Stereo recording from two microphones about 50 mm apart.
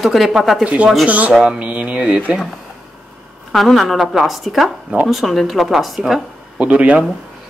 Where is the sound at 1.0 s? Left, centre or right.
Right.